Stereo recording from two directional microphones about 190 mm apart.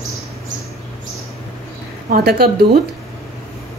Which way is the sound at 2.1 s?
55° right (ahead or behind).